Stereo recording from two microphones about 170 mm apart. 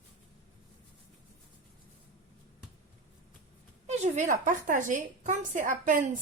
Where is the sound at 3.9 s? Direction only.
45° right (ahead or behind).